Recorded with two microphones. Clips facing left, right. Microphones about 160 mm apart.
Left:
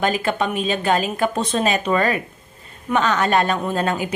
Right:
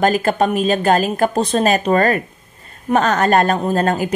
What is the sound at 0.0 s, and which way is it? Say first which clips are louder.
A woman's voice: right 5 dB; 45° right (ahead or behind).